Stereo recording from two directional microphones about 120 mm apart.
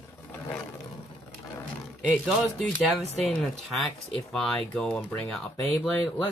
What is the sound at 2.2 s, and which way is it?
Speech, centre (ahead or behind).